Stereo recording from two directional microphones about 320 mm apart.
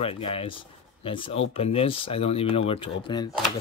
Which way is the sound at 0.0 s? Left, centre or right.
Centre.